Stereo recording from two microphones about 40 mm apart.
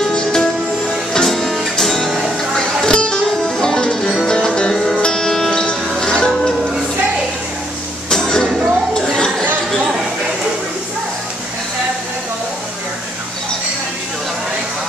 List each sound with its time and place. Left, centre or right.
0.0 s music: centre
2.5 s music: centre
8.1 s music: centre
9.0 s a sound: centre